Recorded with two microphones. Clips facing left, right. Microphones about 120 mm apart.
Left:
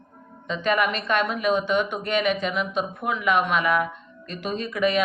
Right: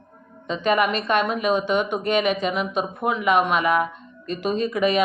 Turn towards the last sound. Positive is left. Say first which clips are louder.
# right 3 dB
turn(degrees=-20)  # may be behind; listen again after turning